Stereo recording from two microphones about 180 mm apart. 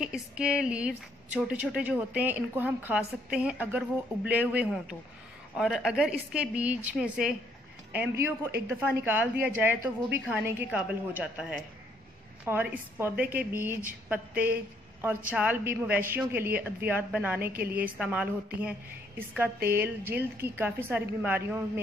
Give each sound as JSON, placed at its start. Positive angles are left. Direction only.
{"t": 0.0, "sound": "a woman's voice", "side_deg": -5}
{"t": 9.8, "sound": "a woman's voice", "side_deg": -55}
{"t": 10.3, "sound": "a woman's voice", "side_deg": -10}